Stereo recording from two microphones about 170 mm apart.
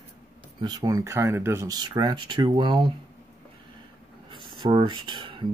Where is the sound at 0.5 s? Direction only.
25° right (ahead or behind).